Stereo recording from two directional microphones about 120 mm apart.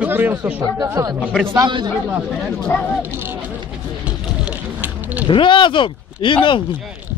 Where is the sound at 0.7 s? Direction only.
30° right (ahead or behind).